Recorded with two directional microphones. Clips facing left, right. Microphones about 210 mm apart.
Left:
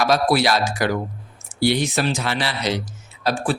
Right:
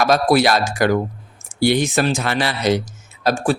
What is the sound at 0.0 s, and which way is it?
Speech, 50° right (ahead or behind).